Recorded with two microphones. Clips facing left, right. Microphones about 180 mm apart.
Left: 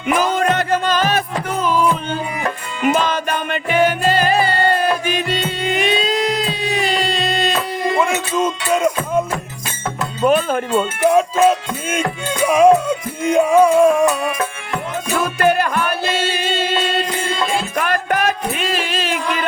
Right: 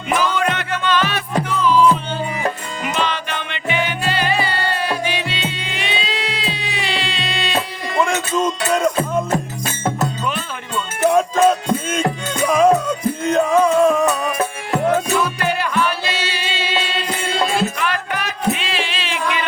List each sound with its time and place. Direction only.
0.1 s music: 45° left (ahead or behind)
2.9 s music: 45° left (ahead or behind)
8.0 s music: 5° left (ahead or behind)
10.2 s music: 50° left (ahead or behind)
11.0 s music: 5° left (ahead or behind)
15.2 s music: 50° left (ahead or behind)